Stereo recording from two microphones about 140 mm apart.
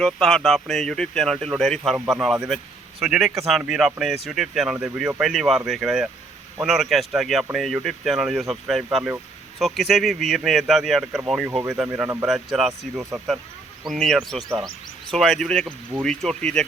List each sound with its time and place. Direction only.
0.0 s speech: 5° left (ahead or behind)
11.9 s speech: 15° right (ahead or behind)
12.2 s speech: centre (ahead or behind)
13.0 s speech: 20° right (ahead or behind)
13.8 s speech: centre (ahead or behind)